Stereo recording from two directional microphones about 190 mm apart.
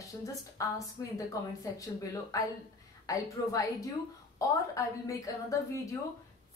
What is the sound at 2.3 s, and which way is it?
A woman's voice, 15° left (ahead or behind).